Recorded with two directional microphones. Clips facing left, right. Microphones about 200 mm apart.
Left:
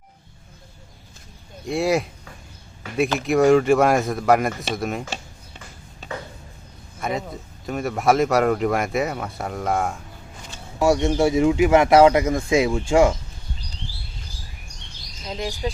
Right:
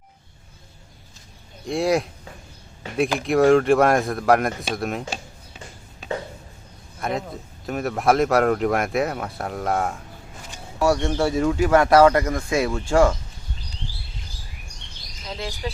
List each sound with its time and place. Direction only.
1.6 s speech: centre (ahead or behind)
3.2 s speech: centre (ahead or behind)
7.0 s speech: centre (ahead or behind)
10.8 s speech: 20° left (ahead or behind)
15.3 s speech: 15° left (ahead or behind)